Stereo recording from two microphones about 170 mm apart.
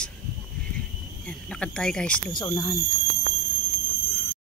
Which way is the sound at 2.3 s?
25° left (ahead or behind).